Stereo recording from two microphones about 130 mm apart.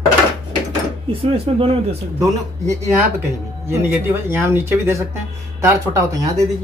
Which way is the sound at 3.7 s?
15° right (ahead or behind).